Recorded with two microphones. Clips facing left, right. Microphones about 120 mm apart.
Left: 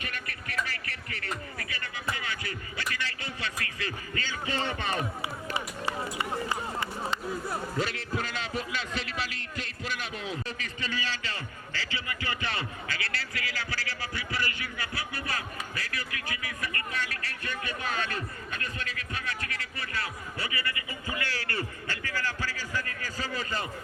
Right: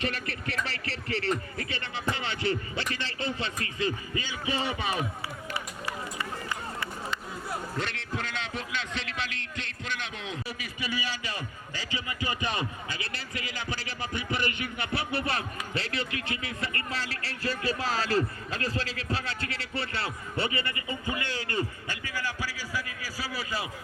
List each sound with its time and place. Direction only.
0.0 s music: 30° right (ahead or behind); by 5.0 s 10° right (ahead or behind)
5.5 s run: 25° left (ahead or behind)
7.8 s music: 5° left (ahead or behind)
10.4 s a sound: 10° right (ahead or behind)